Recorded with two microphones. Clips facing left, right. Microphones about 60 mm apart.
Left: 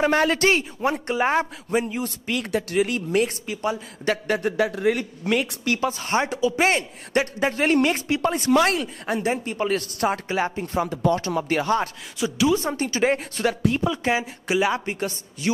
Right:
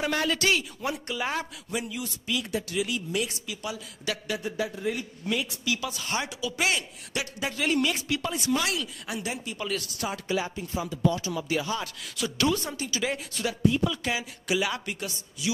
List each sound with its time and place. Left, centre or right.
0.0 s a man's voice: left
5.8 s a man's voice: left
12.2 s a woman's voice: centre
12.6 s a man's voice: left
13.7 s a woman's voice: left